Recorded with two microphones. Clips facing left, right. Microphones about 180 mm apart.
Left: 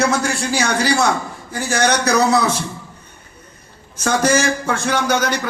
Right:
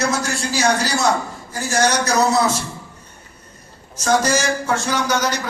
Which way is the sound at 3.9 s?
60° left (ahead or behind).